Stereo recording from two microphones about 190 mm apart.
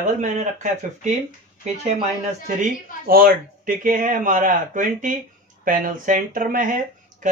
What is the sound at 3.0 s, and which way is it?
A man's voice, 50° right (ahead or behind).